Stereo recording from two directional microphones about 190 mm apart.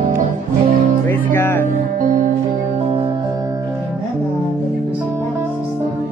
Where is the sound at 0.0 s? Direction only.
45° right (ahead or behind).